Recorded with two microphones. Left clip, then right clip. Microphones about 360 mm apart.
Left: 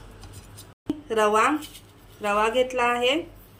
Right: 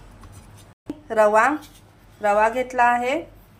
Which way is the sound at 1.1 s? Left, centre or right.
Centre.